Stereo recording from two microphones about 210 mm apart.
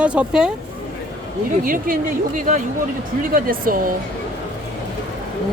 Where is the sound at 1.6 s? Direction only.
40° right (ahead or behind).